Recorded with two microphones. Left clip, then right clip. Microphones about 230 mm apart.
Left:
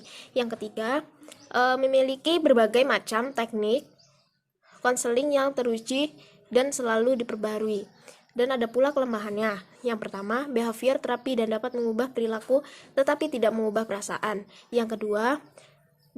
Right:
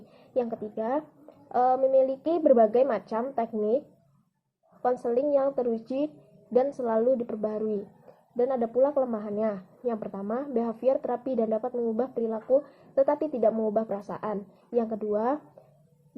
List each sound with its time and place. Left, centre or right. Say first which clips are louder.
0.3 s speech: left 1 dB; left
4.8 s speech: left 1 dB; left